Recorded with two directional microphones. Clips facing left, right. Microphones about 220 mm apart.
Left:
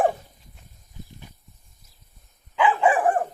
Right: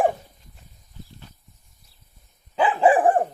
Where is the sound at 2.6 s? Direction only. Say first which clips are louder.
Right 2 dB; 35° right (ahead or behind).